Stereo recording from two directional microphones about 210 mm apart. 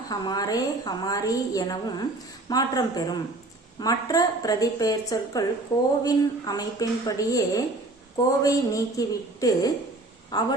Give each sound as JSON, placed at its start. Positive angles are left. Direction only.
{"t": 0.1, "sound": "a woman's voice", "side_deg": 20}